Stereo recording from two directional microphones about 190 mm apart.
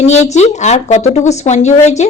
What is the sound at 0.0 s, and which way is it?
Speech, 35° left (ahead or behind).